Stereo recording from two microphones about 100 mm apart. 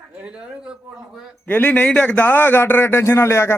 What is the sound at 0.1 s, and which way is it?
A man's voice, 10° right (ahead or behind).